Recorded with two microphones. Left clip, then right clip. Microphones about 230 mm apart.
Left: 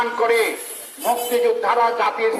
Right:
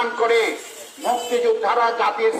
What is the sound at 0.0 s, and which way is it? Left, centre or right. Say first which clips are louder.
Speech: even; left.